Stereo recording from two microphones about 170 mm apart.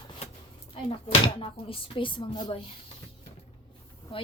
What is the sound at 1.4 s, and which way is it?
A woman's voice, 30° left (ahead or behind).